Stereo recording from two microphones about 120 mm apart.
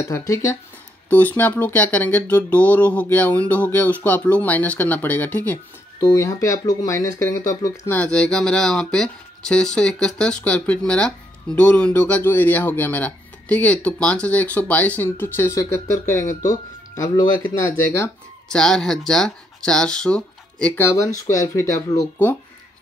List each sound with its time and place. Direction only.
0.1 s speech: 25° left (ahead or behind)
1.1 s speech: 15° left (ahead or behind)
5.9 s speech: 25° left (ahead or behind)
7.9 s speech: 10° left (ahead or behind); by 17.3 s 30° left (ahead or behind)
18.5 s speech: 5° left (ahead or behind)
20.7 s speech: 20° left (ahead or behind)